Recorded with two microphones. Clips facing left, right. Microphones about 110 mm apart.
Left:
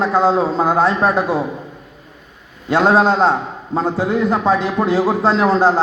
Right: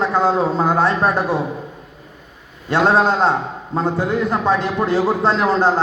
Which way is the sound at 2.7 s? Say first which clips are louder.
Left 2 dB; centre (ahead or behind).